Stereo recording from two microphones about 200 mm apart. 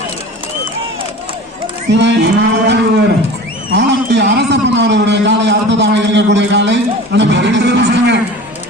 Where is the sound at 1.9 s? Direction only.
60° right (ahead or behind).